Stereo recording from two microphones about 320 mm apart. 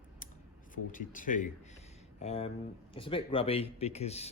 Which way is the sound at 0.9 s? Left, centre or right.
Left.